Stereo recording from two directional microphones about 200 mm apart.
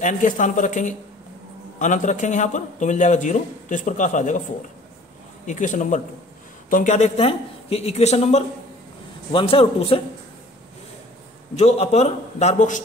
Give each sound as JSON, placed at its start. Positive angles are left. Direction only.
{"t": 0.0, "sound": "a man's voice", "side_deg": 40}
{"t": 5.5, "sound": "a man's voice", "side_deg": 40}
{"t": 11.5, "sound": "a man's voice", "side_deg": 35}